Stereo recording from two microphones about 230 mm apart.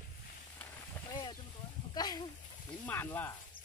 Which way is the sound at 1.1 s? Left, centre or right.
Centre.